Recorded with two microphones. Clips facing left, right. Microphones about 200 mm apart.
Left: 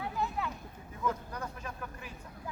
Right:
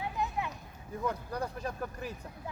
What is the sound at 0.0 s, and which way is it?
Children playing, 20° right (ahead or behind).